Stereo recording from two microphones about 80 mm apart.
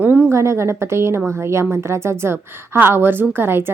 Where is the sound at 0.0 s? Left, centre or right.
Right.